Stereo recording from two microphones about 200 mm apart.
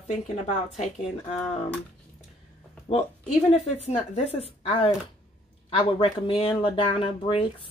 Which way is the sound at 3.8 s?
35° left (ahead or behind).